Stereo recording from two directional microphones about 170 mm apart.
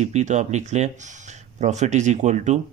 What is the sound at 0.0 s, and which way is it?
Speech, 45° right (ahead or behind).